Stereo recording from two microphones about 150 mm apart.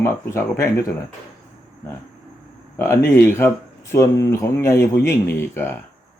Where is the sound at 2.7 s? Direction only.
15° left (ahead or behind).